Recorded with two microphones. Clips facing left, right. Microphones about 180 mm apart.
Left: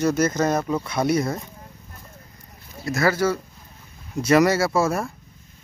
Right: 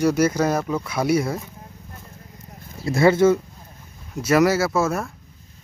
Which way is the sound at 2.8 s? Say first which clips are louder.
Right 5 dB; 25° right (ahead or behind).